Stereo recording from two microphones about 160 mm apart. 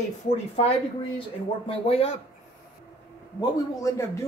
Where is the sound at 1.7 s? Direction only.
40° left (ahead or behind).